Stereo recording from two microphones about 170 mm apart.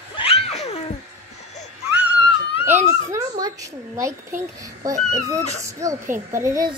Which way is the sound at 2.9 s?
20° right (ahead or behind).